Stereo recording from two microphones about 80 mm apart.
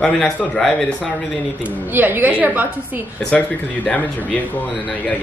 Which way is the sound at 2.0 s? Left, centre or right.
Right.